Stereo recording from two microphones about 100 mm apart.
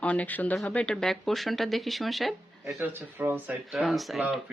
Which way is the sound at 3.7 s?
Centre (ahead or behind).